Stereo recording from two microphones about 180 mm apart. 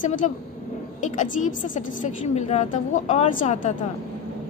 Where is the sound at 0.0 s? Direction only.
45° left (ahead or behind).